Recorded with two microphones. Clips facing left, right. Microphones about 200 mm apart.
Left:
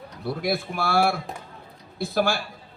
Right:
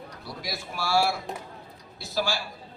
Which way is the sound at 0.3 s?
55° left (ahead or behind).